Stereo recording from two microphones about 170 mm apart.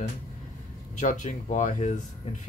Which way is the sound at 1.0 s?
45° left (ahead or behind).